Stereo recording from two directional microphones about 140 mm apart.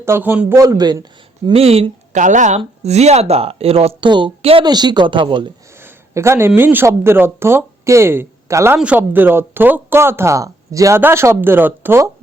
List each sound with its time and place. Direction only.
0.0 s speech: 15° right (ahead or behind)
1.5 s speech: 45° right (ahead or behind)
2.1 s speech: 60° right (ahead or behind); by 5.5 s 35° right (ahead or behind)
5.7 s a sound: 20° right (ahead or behind)
6.5 s speech: 15° right (ahead or behind)